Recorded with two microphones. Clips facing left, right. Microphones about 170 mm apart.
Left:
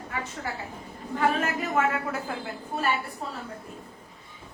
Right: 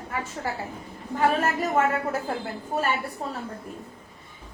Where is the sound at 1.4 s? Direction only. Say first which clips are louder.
Right 3 dB; 40° right (ahead or behind).